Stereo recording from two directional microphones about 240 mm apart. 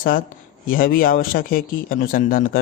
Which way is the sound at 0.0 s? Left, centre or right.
Left.